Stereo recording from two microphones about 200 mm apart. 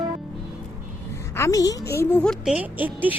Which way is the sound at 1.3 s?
15° left (ahead or behind).